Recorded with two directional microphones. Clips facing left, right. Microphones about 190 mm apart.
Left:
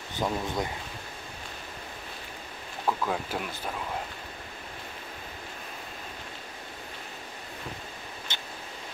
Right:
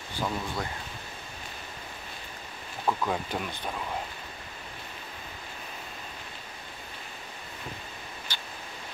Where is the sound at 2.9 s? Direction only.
Centre (ahead or behind).